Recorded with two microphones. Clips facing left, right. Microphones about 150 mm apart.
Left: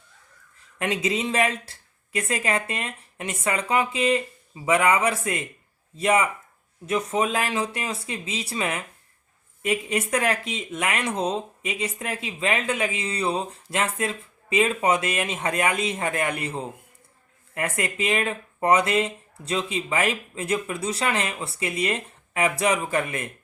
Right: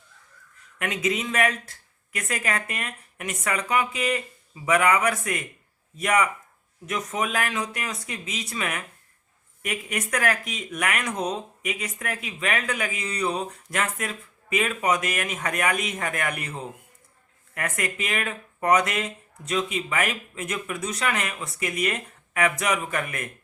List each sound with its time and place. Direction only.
0.8 s speech: 30° left (ahead or behind)